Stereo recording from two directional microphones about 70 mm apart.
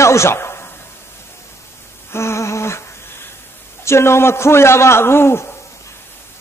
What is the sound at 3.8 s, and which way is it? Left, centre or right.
A man's voice, left.